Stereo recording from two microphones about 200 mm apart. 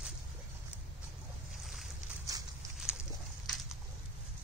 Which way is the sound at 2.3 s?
20° right (ahead or behind).